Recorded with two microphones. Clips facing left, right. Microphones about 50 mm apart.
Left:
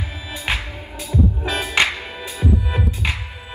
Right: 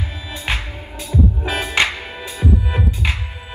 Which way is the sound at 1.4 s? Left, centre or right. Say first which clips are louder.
Right 1 dB; right.